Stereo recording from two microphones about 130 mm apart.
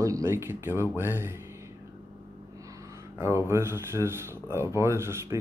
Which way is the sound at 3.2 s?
20° right (ahead or behind).